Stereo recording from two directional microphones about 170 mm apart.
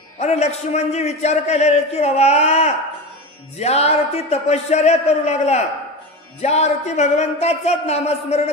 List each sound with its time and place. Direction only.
0.2 s a man's voice: 40° left (ahead or behind)